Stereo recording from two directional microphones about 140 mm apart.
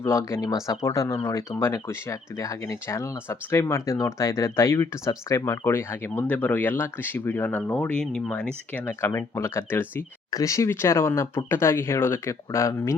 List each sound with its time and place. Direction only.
0.0 s speech: 20° left (ahead or behind)